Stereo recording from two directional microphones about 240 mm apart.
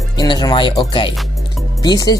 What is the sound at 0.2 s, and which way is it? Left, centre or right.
Speech, centre.